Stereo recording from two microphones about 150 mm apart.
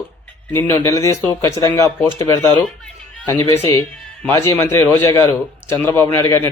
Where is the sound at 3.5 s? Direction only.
25° left (ahead or behind).